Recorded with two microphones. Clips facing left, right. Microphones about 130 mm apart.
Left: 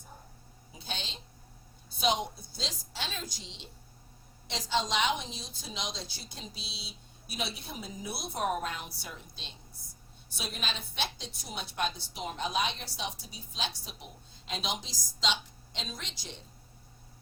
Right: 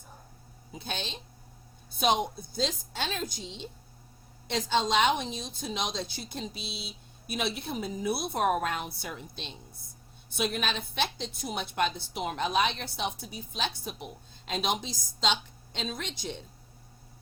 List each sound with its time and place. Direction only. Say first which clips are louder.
0.8 s a woman's voice: right 4 dB; 55° right (ahead or behind)